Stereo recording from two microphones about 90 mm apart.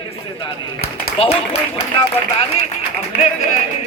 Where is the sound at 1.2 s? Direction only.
90° left.